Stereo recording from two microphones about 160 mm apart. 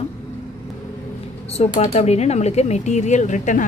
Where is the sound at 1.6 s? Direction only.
40° left (ahead or behind).